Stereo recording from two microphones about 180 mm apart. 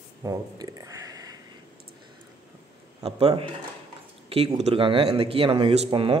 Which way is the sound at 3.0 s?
30° right (ahead or behind).